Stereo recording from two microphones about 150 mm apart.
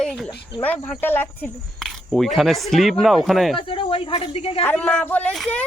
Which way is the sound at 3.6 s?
35° left (ahead or behind).